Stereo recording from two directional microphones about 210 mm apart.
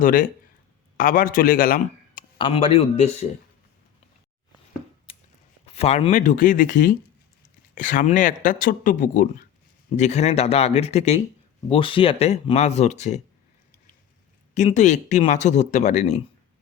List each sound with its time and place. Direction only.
0.0 s a man's voice: 40° left (ahead or behind)
2.4 s a man's voice: 30° left (ahead or behind)
5.6 s speech: 30° left (ahead or behind)
14.5 s speech: 35° left (ahead or behind)